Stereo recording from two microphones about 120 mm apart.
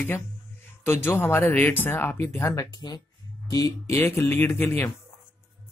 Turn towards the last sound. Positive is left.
turn(degrees=20)  # may be behind; listen again after turning